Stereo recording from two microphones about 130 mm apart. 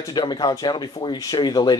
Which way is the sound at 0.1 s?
35° left (ahead or behind).